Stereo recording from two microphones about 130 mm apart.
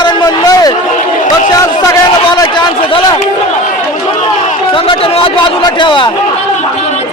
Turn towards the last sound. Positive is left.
turn(degrees=40)  # may be behind; listen again after turning